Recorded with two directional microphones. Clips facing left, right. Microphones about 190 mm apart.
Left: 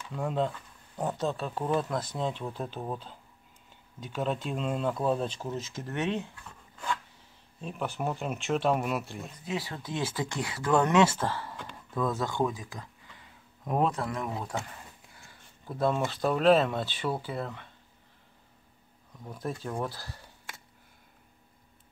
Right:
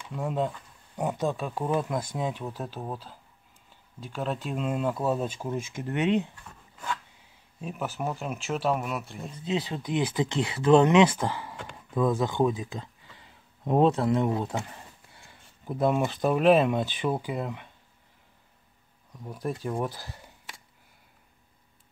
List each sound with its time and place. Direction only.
0.1 s speech: 5° right (ahead or behind)
7.6 s speech: 5° right (ahead or behind)
9.4 s speech: 20° right (ahead or behind)
19.1 s speech: 10° right (ahead or behind)